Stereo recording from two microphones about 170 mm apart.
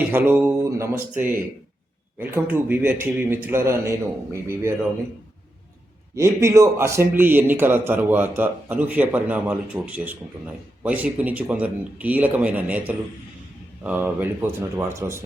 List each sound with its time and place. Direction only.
0.1 s a man's voice: 15° right (ahead or behind)
6.1 s a man's voice: 15° right (ahead or behind)
13.8 s a man's voice: 10° right (ahead or behind)